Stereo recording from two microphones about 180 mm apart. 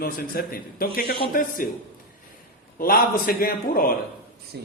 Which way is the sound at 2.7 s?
55° left (ahead or behind).